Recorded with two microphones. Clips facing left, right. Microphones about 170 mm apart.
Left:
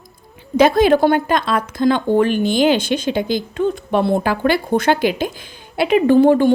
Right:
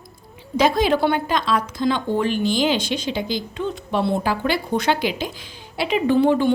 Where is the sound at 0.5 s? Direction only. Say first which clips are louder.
Left 6 dB; 55° left (ahead or behind).